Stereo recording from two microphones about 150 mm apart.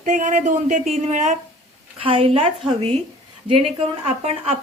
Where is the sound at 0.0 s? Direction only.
55° right (ahead or behind).